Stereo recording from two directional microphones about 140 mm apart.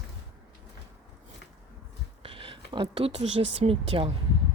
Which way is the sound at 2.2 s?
40° right (ahead or behind).